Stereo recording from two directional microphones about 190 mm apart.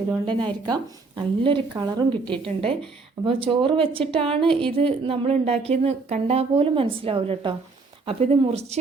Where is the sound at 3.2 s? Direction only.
30° right (ahead or behind).